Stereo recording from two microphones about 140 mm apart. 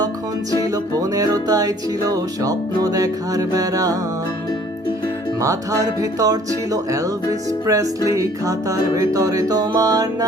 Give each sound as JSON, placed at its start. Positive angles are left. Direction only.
{"t": 0.7, "sound": "music", "side_deg": -25}
{"t": 5.4, "sound": "music", "side_deg": -25}